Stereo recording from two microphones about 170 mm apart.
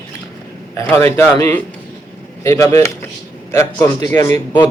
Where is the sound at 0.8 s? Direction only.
15° left (ahead or behind).